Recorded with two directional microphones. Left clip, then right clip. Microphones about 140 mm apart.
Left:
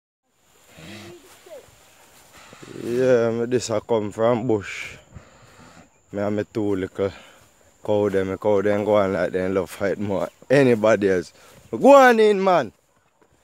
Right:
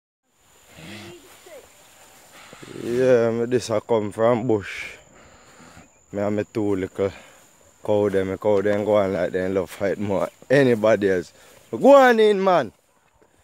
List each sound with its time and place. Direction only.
0.7 s a sound: 5° left (ahead or behind)
2.3 s speech: centre (ahead or behind); by 10.0 s 20° left (ahead or behind)
10.0 s speech: 5° left (ahead or behind)
10.5 s speech: 25° left (ahead or behind)